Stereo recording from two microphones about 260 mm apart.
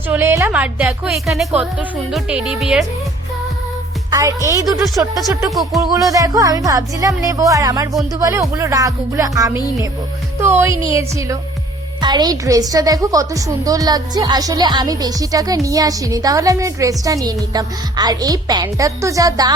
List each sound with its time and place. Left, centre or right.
0.1 s speech: centre
4.1 s a woman's voice: centre